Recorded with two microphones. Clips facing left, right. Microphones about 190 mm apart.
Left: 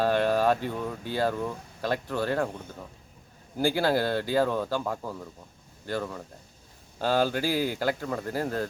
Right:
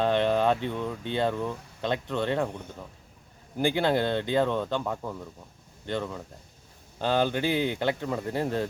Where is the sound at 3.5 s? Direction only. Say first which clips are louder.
Even; 20° right (ahead or behind).